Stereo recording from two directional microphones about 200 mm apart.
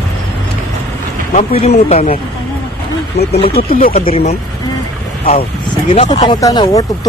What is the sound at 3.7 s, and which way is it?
Speech, 45° left (ahead or behind).